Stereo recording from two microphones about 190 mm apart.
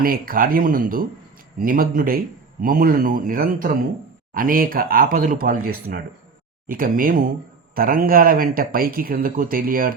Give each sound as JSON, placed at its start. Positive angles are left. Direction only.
{"t": 0.0, "sound": "speech", "side_deg": -50}
{"t": 6.7, "sound": "speech", "side_deg": -45}